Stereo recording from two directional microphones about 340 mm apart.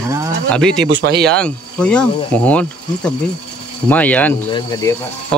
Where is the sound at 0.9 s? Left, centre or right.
Right.